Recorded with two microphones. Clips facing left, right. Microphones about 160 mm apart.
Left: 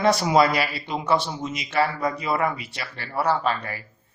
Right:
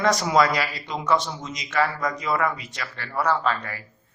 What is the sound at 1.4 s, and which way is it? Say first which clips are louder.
Speech: left 5 dB; 10° left (ahead or behind).